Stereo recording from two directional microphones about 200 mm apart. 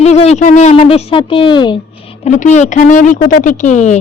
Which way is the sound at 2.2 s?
35° left (ahead or behind).